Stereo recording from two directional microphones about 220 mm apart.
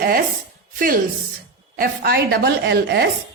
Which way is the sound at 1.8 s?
45° right (ahead or behind).